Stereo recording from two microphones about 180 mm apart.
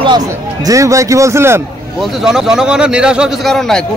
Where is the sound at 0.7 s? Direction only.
15° right (ahead or behind).